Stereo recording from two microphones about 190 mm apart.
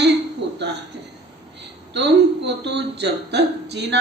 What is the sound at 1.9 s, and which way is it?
A woman's voice, 65° right (ahead or behind).